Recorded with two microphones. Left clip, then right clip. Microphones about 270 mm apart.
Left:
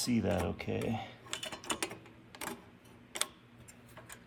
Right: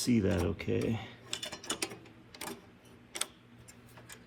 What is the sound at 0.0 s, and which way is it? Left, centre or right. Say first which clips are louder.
Speech: right 2 dB; centre.